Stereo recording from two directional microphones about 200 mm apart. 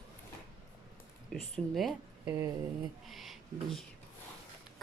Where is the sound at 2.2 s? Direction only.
15° right (ahead or behind).